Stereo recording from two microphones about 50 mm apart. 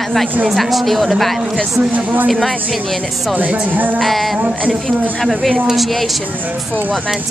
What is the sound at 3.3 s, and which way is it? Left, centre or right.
Speech, right.